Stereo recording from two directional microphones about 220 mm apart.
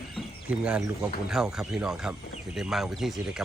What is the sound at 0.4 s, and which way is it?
Speech, 5° right (ahead or behind).